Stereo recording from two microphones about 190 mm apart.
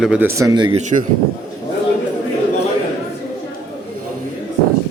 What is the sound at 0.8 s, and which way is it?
Speech, 40° right (ahead or behind).